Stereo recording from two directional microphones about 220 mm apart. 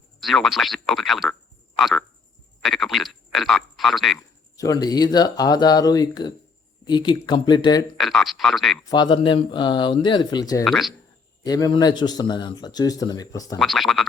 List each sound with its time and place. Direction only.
0.2 s speech: centre (ahead or behind)
1.8 s frog: centre (ahead or behind)
2.6 s speech: centre (ahead or behind)
4.5 s speech: 15° left (ahead or behind)
7.9 s speech: centre (ahead or behind)
8.8 s speech: 20° left (ahead or behind)
10.6 s speech: centre (ahead or behind)
11.4 s speech: 15° left (ahead or behind)
13.6 s speech: centre (ahead or behind)